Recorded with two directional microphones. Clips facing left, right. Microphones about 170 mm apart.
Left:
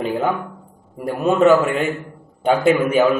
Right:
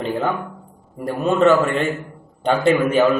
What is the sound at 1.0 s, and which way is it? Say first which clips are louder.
A man's voice: left 1 dB; 5° left (ahead or behind).